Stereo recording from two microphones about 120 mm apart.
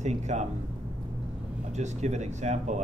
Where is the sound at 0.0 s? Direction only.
70° right (ahead or behind).